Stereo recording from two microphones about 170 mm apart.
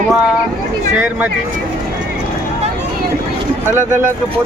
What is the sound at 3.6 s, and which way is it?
Speech, 15° right (ahead or behind).